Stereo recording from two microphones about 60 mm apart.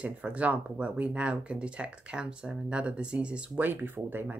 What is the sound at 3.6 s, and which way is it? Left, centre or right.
Speech, right.